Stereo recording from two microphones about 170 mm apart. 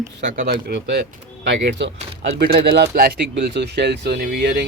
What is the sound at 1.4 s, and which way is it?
Speech, 90° right.